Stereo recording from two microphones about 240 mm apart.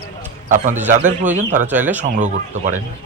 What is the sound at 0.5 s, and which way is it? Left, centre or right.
Speech, right.